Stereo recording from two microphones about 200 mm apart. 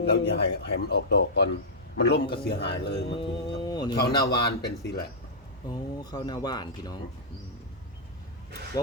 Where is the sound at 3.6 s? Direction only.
20° left (ahead or behind).